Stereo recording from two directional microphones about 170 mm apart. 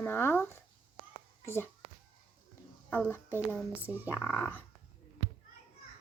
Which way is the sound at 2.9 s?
10° left (ahead or behind).